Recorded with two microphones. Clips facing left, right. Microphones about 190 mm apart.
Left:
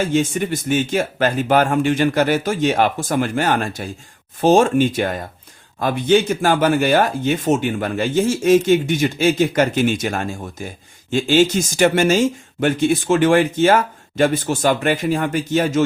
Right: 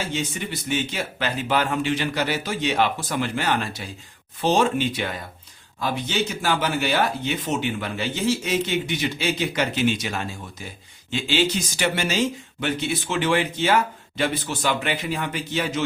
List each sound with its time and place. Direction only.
0.0 s speech: 50° left (ahead or behind)